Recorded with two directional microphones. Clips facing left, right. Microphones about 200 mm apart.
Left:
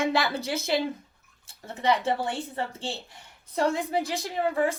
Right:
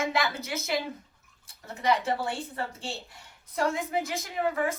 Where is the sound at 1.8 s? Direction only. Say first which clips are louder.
Left 2 dB; 30° left (ahead or behind).